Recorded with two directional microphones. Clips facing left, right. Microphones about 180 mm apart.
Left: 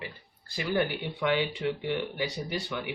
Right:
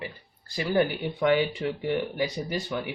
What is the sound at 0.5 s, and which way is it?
Speech, 40° right (ahead or behind).